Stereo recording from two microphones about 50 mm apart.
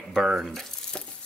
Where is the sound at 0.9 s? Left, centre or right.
Left.